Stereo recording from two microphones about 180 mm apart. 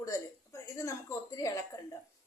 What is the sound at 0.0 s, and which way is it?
A woman's voice, 15° left (ahead or behind).